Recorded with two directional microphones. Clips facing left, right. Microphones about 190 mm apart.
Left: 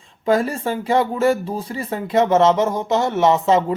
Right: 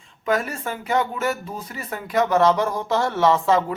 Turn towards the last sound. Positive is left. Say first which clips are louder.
# left 3 dB
turn(degrees=20)  # may be behind; listen again after turning